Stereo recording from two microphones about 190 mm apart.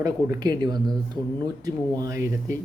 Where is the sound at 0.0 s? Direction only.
20° right (ahead or behind).